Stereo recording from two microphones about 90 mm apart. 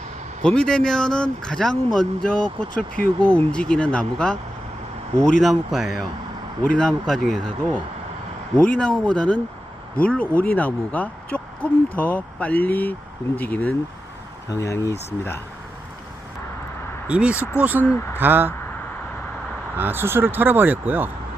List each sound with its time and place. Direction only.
0.4 s a man's voice: 10° left (ahead or behind)
8.5 s speech: 10° left (ahead or behind)
14.5 s speech: 35° left (ahead or behind)
17.1 s speech: 15° right (ahead or behind)
17.3 s speech: 25° left (ahead or behind)
17.6 s speech: 20° right (ahead or behind)
17.8 s speech: 25° left (ahead or behind)
18.2 s speech: 25° right (ahead or behind)
19.7 s speech: 25° right (ahead or behind)